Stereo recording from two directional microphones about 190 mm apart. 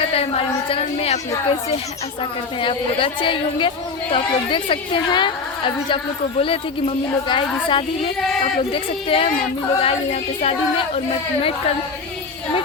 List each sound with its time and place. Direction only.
0.1 s speech: 30° left (ahead or behind)
2.6 s a woman's voice: 25° left (ahead or behind)